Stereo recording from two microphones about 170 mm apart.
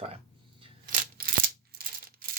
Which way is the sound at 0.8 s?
60° right (ahead or behind).